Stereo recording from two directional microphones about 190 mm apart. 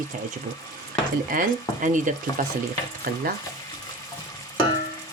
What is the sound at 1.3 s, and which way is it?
Speech, 45° right (ahead or behind).